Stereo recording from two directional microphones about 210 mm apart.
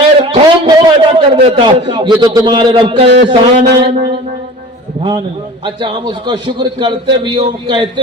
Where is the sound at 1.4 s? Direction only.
25° right (ahead or behind).